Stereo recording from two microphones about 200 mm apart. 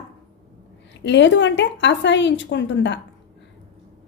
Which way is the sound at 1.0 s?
65° left (ahead or behind).